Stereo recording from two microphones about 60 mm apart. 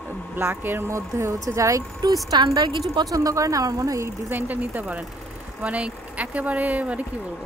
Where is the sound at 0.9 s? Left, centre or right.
Right.